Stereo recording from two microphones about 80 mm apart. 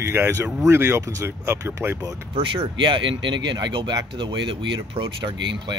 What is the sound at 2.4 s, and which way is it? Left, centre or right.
Speech, right.